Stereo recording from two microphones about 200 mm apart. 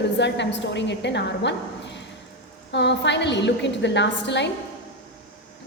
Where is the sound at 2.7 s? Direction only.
60° left (ahead or behind).